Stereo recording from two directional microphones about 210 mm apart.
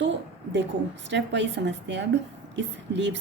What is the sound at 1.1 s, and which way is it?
A woman's voice, 55° right (ahead or behind).